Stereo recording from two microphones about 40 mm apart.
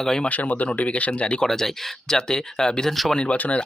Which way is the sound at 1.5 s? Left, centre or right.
Centre.